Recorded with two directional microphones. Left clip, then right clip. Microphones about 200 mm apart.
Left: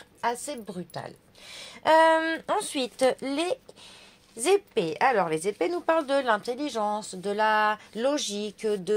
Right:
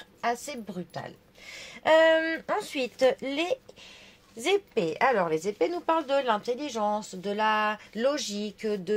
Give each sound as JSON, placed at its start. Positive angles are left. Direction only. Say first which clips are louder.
{"t": 0.5, "sound": "a woman's voice", "louder": "left 2 dB", "side_deg": 30}